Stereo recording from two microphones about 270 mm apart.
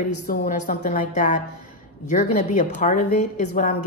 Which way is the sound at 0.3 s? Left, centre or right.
Left.